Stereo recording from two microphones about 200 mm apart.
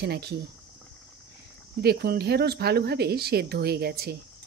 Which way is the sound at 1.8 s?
50° right (ahead or behind).